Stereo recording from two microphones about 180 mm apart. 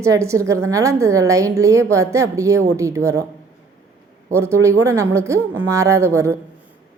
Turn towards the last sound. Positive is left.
turn(degrees=-15)  # may be behind; listen again after turning